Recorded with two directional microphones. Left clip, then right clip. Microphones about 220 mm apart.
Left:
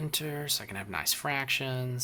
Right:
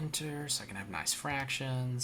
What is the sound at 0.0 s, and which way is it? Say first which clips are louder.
Speech: left 5 dB; 45° left (ahead or behind).